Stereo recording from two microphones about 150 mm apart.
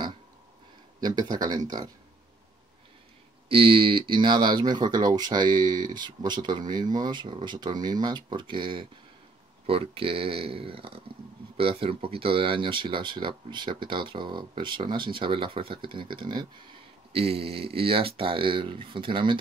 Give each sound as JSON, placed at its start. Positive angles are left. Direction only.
{"t": 1.0, "sound": "speech", "side_deg": -30}
{"t": 3.4, "sound": "speech", "side_deg": -40}